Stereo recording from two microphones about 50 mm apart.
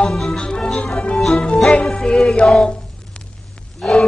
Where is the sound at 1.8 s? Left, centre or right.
Centre.